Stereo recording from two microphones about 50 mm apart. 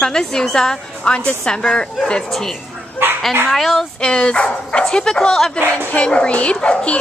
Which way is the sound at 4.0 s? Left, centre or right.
Centre.